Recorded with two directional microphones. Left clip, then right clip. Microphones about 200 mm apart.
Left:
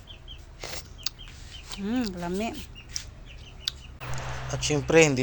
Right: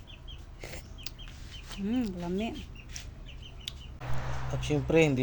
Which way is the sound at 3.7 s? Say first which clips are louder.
Left 9 dB; centre (ahead or behind).